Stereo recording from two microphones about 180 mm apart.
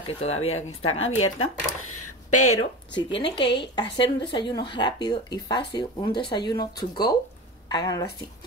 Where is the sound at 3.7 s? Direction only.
25° left (ahead or behind).